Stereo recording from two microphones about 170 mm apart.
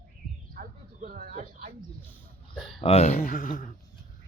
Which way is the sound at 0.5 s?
55° right (ahead or behind).